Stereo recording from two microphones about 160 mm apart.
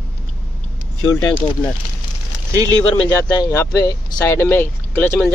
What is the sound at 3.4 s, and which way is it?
Speech, 20° left (ahead or behind).